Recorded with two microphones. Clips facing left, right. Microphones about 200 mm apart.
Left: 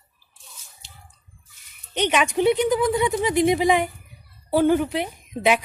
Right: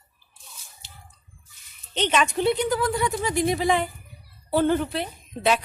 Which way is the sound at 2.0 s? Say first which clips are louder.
Left 2 dB; 15° left (ahead or behind).